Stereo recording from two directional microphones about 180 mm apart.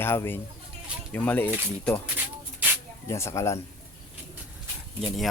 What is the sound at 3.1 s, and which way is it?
Speech, 15° left (ahead or behind).